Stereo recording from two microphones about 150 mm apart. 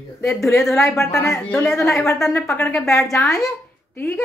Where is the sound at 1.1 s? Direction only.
20° left (ahead or behind).